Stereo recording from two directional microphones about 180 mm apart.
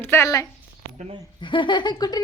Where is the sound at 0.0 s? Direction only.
15° left (ahead or behind).